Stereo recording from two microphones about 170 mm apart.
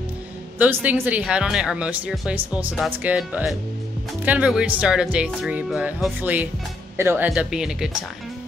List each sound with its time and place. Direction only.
0.8 s speech: 10° right (ahead or behind)